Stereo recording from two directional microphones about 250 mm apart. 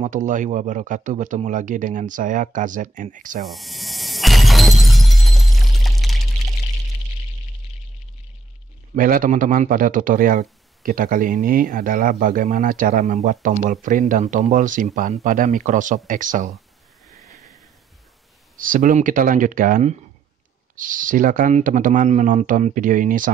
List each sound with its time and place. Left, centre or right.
0.0 s a man's voice: right
3.4 s shatter: centre
8.9 s a man's voice: right
17.1 s a sound: centre
18.6 s a man's voice: right